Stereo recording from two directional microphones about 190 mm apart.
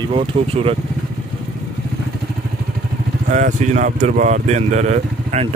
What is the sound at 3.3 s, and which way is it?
Speech, 40° right (ahead or behind).